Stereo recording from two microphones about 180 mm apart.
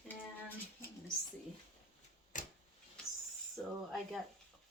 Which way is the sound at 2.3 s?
45° left (ahead or behind).